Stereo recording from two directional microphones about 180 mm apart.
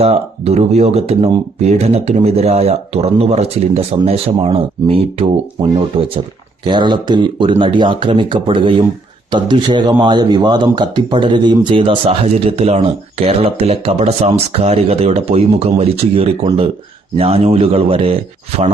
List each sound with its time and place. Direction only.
0.0 s speech: 35° right (ahead or behind)